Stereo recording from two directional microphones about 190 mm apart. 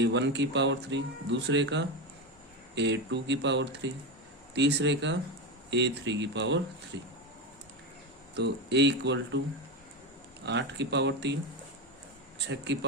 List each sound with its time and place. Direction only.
0.0 s speech: 65° right (ahead or behind)
8.4 s speech: 65° right (ahead or behind)
10.4 s speech: 65° right (ahead or behind)